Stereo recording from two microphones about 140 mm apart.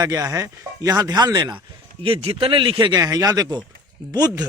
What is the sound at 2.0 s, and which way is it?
A man's voice, 40° right (ahead or behind).